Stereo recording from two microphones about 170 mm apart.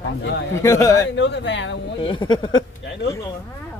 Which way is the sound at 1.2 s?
90° left.